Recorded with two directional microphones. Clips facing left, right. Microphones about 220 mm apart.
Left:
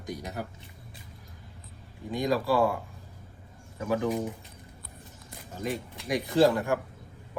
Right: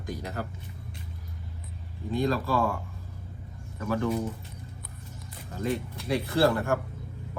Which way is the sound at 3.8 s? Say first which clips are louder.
Even; 15° left (ahead or behind).